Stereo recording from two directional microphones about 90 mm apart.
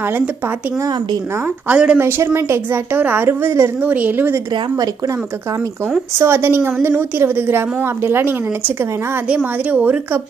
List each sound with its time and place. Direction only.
0.0 s a woman's voice: 25° right (ahead or behind)
1.7 s a woman's voice: 15° right (ahead or behind)
2.0 s a woman's voice: 25° right (ahead or behind)
6.1 s a woman's voice: 30° right (ahead or behind)